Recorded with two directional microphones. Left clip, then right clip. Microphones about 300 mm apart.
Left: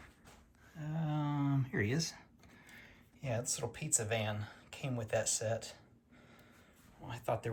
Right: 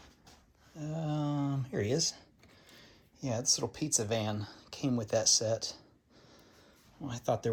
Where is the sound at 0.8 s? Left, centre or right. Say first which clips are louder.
Right 4 dB; centre.